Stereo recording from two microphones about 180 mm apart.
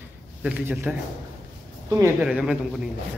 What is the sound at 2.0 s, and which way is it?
Speech, 5° right (ahead or behind).